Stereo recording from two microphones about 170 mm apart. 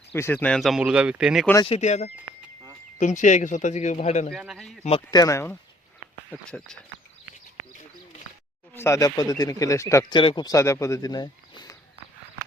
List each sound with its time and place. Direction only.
0.1 s speech: 10° left (ahead or behind); by 1.5 s 5° right (ahead or behind)
1.6 s speech: 40° left (ahead or behind)
4.3 s speech: centre (ahead or behind)
4.8 s speech: 35° left (ahead or behind)
5.1 s speech: 20° left (ahead or behind)
6.3 s speech: 5° left (ahead or behind)
8.7 s speech: 15° left (ahead or behind)